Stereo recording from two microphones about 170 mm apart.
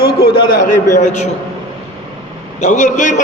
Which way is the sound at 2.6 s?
45° left (ahead or behind).